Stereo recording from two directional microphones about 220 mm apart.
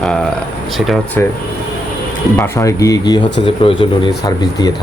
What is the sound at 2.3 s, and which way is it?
Speech, 15° left (ahead or behind).